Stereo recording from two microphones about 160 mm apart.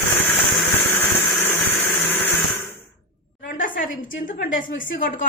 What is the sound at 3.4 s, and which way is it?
A woman's voice, 60° left (ahead or behind).